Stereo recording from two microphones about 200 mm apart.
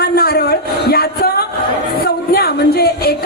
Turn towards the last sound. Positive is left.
turn(degrees=50)  # may be behind; listen again after turning